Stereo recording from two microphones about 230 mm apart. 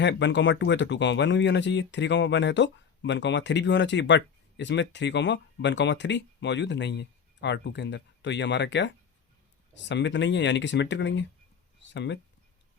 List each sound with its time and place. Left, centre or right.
0.0 s speech: left